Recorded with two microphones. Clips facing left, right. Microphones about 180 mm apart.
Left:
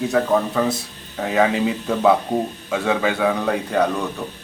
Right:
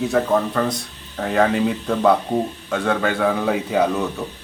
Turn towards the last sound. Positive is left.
turn(degrees=-5)  # may be behind; listen again after turning